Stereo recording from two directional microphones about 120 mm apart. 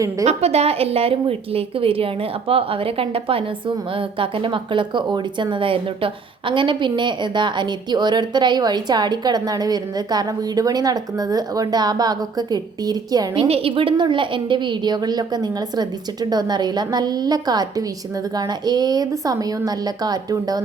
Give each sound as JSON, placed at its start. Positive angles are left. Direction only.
{"t": 0.3, "sound": "a woman's voice", "side_deg": -60}
{"t": 13.5, "sound": "a woman's voice", "side_deg": -50}